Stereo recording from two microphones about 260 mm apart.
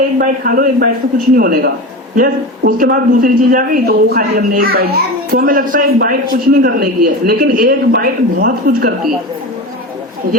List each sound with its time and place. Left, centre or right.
0.2 s speech: right